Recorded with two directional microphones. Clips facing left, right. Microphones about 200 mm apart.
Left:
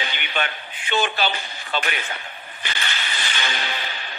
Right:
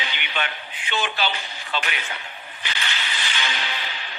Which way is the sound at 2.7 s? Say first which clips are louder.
Left 1 dB; 50° left (ahead or behind).